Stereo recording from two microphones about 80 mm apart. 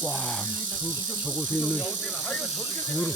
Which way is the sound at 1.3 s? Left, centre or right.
Left.